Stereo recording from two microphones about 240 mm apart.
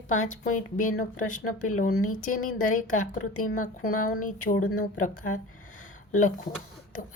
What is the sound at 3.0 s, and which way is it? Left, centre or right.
Speech, left.